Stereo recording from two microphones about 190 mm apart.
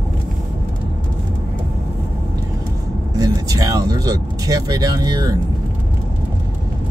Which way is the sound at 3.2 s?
20° right (ahead or behind).